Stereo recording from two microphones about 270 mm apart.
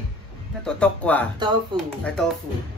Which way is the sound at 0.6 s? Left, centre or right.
Centre.